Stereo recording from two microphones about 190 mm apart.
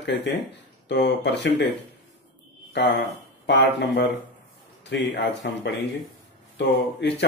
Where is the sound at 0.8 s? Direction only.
65° left (ahead or behind).